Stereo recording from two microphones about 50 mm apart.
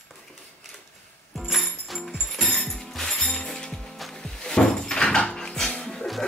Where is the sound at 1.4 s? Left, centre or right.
Centre.